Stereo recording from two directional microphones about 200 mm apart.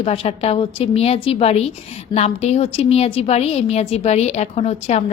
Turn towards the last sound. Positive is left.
turn(degrees=30)  # may be behind; listen again after turning